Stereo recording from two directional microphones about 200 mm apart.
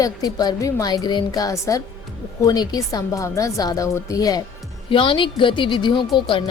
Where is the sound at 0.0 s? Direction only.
20° left (ahead or behind).